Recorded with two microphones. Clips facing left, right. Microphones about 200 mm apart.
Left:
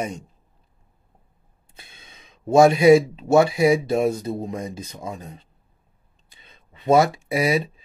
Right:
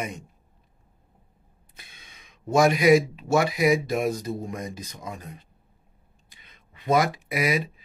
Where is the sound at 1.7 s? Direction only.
25° left (ahead or behind).